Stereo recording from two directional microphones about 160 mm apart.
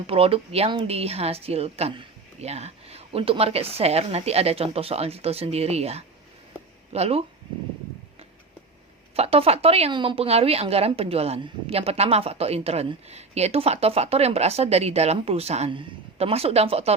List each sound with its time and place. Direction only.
0.1 s a woman's voice: 35° right (ahead or behind)
9.1 s a woman's voice: 40° right (ahead or behind)